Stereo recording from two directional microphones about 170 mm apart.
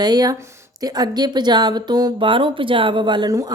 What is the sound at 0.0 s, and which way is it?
Speech, 25° right (ahead or behind).